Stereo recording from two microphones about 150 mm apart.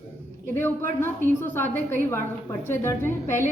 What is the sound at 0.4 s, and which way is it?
A man's voice, 15° left (ahead or behind).